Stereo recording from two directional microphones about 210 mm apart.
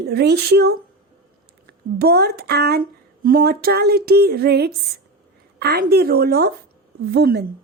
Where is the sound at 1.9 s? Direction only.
50° right (ahead or behind).